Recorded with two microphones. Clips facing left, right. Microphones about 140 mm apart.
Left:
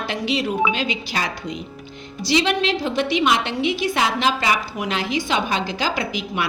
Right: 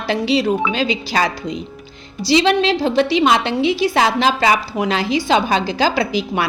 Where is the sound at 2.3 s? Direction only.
30° right (ahead or behind).